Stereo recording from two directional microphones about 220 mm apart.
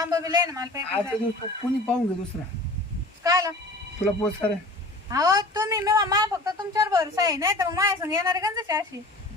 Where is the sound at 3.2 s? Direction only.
15° right (ahead or behind).